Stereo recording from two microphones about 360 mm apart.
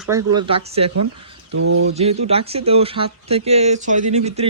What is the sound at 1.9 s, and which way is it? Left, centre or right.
Speech, centre.